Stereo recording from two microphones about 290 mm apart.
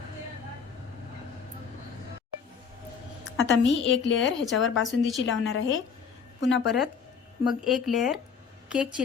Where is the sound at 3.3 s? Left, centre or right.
Left.